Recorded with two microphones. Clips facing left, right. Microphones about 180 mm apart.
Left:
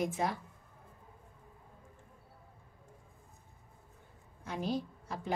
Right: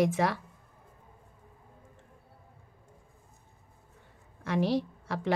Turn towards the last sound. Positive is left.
turn(degrees=-85)